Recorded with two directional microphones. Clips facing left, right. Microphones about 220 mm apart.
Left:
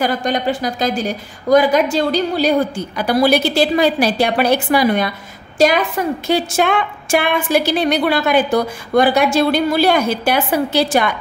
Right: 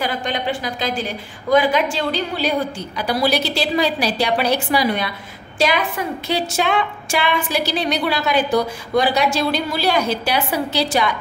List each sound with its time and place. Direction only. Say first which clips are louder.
0.0 s a woman's voice: left 5 dB; 45° left (ahead or behind)